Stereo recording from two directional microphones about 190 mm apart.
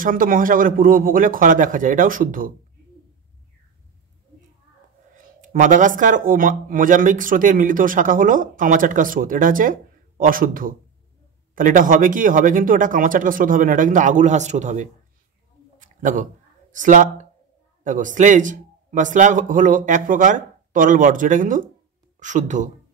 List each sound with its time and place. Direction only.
0.0 s speech: 45° right (ahead or behind)
5.1 s speech: 45° right (ahead or behind)
15.8 s a sound: 40° right (ahead or behind)
16.7 s speech: 40° right (ahead or behind)